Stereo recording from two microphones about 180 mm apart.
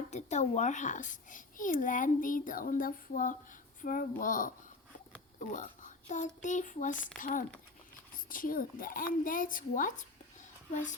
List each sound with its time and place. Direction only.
0.1 s a child's voice: 40° left (ahead or behind)